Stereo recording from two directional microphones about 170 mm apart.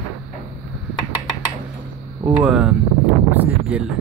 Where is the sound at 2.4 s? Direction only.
Centre (ahead or behind).